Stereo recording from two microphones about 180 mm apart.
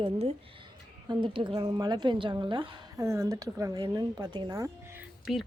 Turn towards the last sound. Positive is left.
turn(degrees=0)  # may be behind; listen again after turning